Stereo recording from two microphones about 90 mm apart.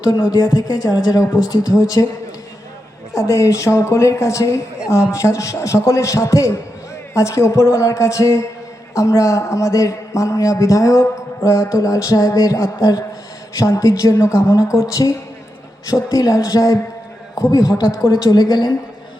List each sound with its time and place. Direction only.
0.0 s a man's voice: 50° left (ahead or behind)
3.2 s a man's voice: 35° left (ahead or behind)